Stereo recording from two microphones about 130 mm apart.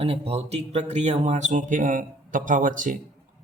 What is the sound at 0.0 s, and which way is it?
Speech, 50° right (ahead or behind).